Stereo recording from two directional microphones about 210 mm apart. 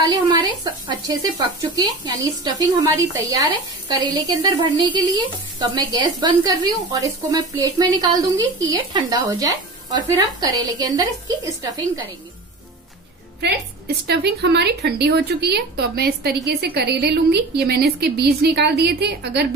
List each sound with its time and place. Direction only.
0.0 s a woman's voice: 20° right (ahead or behind)
14.0 s a woman's voice: 50° right (ahead or behind)